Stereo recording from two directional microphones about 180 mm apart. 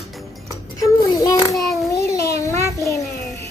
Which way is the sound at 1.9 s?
15° left (ahead or behind).